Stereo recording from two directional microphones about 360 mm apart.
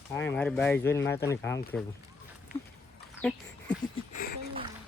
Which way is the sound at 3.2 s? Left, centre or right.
Centre.